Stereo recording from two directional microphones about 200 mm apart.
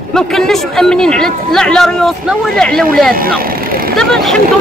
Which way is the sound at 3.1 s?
45° right (ahead or behind).